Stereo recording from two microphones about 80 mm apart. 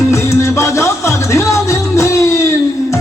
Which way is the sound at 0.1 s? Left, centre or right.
Left.